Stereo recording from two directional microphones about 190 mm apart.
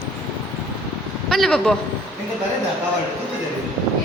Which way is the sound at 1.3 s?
Centre (ahead or behind).